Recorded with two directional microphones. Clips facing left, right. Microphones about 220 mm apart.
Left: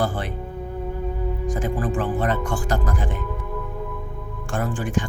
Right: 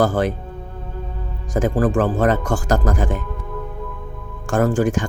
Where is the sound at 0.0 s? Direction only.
45° right (ahead or behind).